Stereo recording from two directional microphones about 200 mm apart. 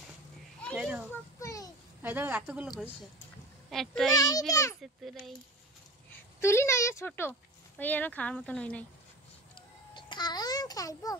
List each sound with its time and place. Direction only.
0.7 s a sound: 10° right (ahead or behind)
1.4 s child singing: 15° left (ahead or behind)
2.0 s speech: 10° right (ahead or behind)
3.7 s a child's voice: centre (ahead or behind)
4.1 s speech: 15° left (ahead or behind)
5.0 s a child's voice: centre (ahead or behind)
6.4 s speech: 15° left (ahead or behind)
9.9 s babbling: 20° left (ahead or behind)